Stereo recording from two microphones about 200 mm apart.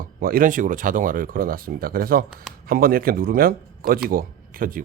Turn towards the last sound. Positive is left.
turn(degrees=-45)  # may be behind; listen again after turning